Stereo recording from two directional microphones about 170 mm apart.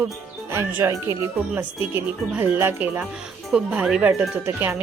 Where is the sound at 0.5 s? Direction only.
15° right (ahead or behind).